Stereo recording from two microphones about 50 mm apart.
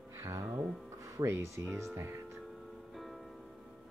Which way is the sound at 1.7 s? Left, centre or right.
Right.